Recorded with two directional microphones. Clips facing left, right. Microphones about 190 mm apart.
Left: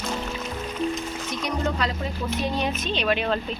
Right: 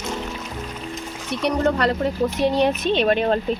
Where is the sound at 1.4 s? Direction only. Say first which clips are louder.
Right 8 dB; 65° right (ahead or behind).